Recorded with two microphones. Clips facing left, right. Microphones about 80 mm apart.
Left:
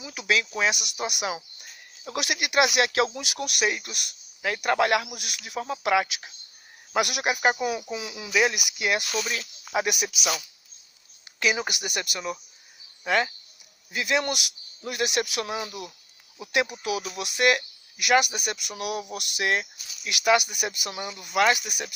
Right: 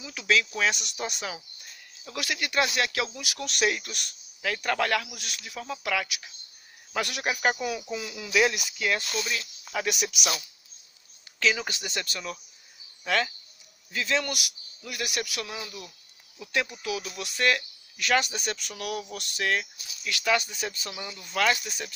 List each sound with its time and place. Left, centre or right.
0.0 s speech: centre
2.0 s speech: left
3.5 s speech: centre
9.9 s speech: centre
11.3 s speech: left